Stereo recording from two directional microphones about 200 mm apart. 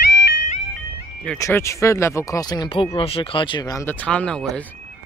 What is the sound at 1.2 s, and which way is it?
Speech, 15° left (ahead or behind).